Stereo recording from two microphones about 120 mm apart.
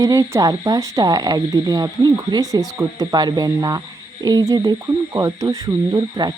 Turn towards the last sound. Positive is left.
turn(degrees=-35)  # may be behind; listen again after turning